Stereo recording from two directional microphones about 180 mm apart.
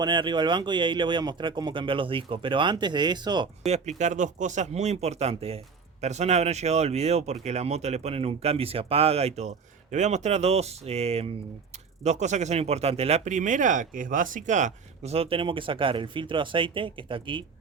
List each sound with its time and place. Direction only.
0.0 s speech: 25° right (ahead or behind)
3.7 s speech: 40° right (ahead or behind)